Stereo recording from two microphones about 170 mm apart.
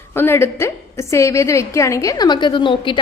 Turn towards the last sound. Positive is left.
turn(degrees=30)  # may be behind; listen again after turning